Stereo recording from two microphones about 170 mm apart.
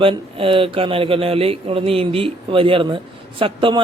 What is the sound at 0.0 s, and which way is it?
A man's voice, 30° right (ahead or behind).